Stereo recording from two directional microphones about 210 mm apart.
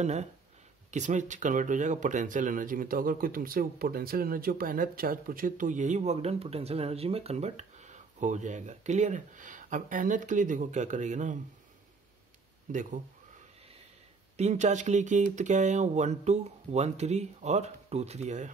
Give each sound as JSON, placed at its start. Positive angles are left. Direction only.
{"t": 0.0, "sound": "speech", "side_deg": -35}
{"t": 12.7, "sound": "speech", "side_deg": -40}
{"t": 14.3, "sound": "speech", "side_deg": -30}